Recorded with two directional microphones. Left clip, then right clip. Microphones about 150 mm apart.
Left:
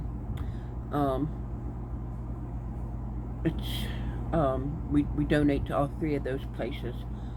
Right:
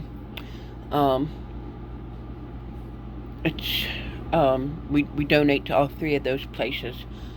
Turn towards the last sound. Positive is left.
turn(degrees=-25)  # may be behind; listen again after turning